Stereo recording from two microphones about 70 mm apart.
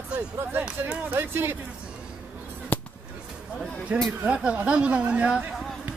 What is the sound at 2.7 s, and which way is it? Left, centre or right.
Fireworks, left.